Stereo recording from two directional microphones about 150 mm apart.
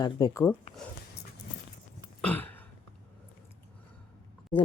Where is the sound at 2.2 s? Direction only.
10° left (ahead or behind).